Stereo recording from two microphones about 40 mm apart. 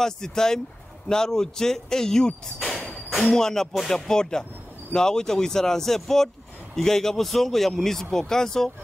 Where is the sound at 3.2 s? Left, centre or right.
Centre.